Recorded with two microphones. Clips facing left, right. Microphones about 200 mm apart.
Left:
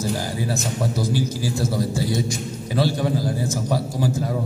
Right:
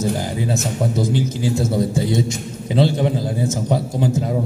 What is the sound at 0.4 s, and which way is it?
A man's voice, 20° right (ahead or behind).